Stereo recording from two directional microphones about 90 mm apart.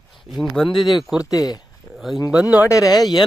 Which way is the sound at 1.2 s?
40° left (ahead or behind).